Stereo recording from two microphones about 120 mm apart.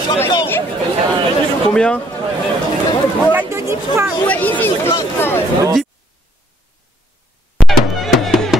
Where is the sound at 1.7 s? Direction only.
10° left (ahead or behind).